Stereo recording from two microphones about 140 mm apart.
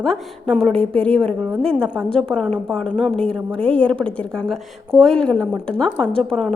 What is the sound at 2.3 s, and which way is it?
A woman's voice, 5° left (ahead or behind).